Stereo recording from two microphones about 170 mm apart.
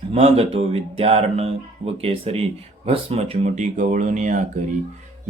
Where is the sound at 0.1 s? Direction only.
35° right (ahead or behind).